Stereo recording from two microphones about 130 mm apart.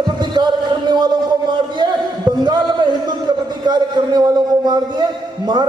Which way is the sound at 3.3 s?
35° right (ahead or behind).